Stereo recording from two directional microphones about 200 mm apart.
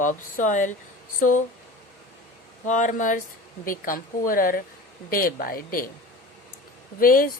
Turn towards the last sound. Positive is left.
turn(degrees=45)  # may be behind; listen again after turning